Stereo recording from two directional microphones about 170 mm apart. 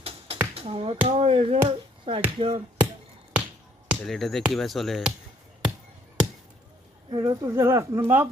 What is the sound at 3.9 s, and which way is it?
Speech, centre (ahead or behind).